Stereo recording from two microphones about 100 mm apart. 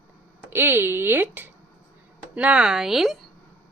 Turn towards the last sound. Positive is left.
turn(degrees=0)  # may be behind; listen again after turning